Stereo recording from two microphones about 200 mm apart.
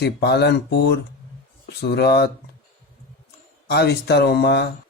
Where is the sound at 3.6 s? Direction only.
55° left (ahead or behind).